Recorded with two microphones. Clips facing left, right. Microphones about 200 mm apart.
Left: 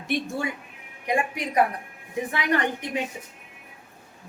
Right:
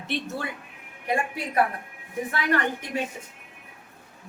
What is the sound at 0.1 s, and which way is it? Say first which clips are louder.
A woman's voice: left 4 dB; 10° left (ahead or behind).